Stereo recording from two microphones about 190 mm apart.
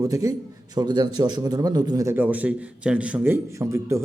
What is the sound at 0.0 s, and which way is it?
A man's voice, 20° right (ahead or behind).